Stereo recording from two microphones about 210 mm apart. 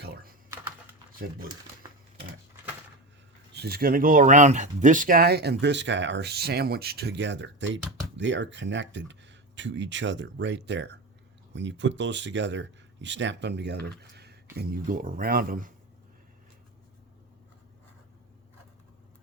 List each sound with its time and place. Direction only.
3.5 s speech: 50° right (ahead or behind)